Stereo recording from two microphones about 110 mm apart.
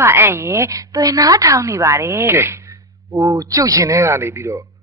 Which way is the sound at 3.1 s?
30° right (ahead or behind).